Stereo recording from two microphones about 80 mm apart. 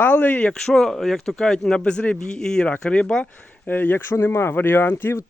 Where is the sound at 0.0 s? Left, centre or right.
Left.